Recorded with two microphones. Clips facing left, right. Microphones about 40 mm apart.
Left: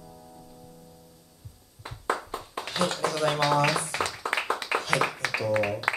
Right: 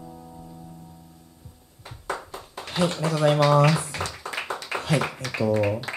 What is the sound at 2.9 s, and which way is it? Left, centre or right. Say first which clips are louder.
Speech: right 7 dB; centre.